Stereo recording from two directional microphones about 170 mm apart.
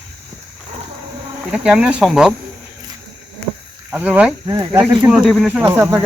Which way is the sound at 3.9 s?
10° right (ahead or behind).